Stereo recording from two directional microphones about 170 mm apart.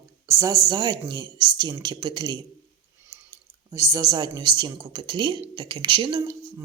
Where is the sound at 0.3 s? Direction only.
20° right (ahead or behind).